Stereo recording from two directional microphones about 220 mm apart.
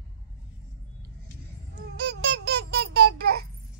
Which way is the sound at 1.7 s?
50° right (ahead or behind).